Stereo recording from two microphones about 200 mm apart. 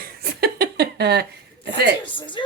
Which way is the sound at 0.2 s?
50° right (ahead or behind).